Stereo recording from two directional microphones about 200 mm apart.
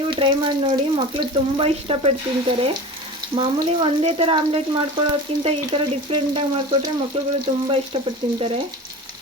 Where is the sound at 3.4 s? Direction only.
30° right (ahead or behind).